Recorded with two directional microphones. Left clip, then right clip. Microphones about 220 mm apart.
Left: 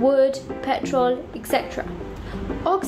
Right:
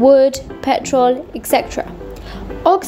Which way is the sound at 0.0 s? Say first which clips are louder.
Right 8 dB; 30° right (ahead or behind).